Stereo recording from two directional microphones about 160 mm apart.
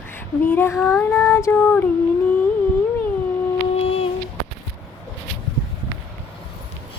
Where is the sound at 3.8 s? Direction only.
40° left (ahead or behind).